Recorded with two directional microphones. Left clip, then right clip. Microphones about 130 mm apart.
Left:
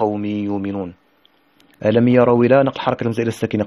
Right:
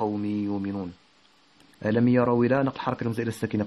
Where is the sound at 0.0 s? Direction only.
25° left (ahead or behind).